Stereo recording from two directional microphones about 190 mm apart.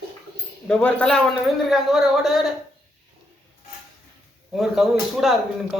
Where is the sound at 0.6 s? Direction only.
5° left (ahead or behind).